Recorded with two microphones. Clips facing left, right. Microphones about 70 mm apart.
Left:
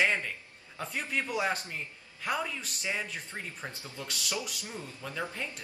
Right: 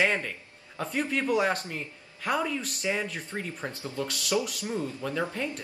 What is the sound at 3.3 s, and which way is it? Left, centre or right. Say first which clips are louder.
Speech: right 6 dB; centre.